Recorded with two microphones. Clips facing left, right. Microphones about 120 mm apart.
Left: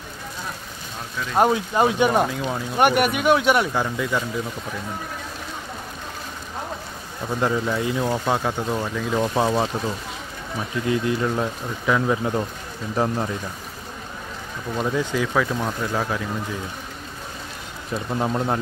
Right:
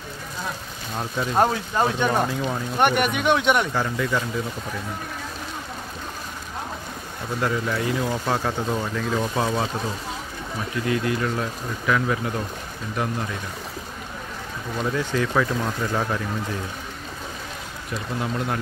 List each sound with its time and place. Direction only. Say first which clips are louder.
1.4 s speech: left 3 dB; 15° left (ahead or behind)
7.3 s speech: left 2 dB; 20° left (ahead or behind)
9.2 s speech: left 6 dB; 20° left (ahead or behind)
10.9 s speech: left 2 dB; 20° left (ahead or behind)
12.9 s speech: left 4 dB; 30° left (ahead or behind)
14.8 s speech: left 1 dB; 15° left (ahead or behind)
18.2 s speech: left 4 dB; 30° left (ahead or behind)